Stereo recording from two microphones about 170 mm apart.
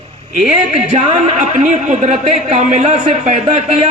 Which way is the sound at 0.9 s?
40° right (ahead or behind).